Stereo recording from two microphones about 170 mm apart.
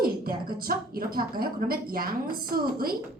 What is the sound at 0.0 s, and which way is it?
A woman's voice, 60° right (ahead or behind).